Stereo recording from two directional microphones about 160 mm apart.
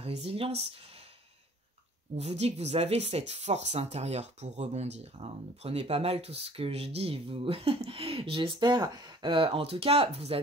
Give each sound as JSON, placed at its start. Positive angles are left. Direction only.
{"t": 0.0, "sound": "speech", "side_deg": -40}
{"t": 2.1, "sound": "speech", "side_deg": -40}